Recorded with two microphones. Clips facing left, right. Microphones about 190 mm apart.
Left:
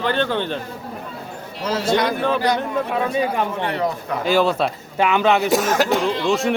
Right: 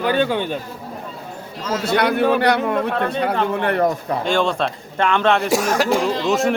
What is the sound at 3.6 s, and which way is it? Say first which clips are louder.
Speech: right 4 dB; 55° right (ahead or behind).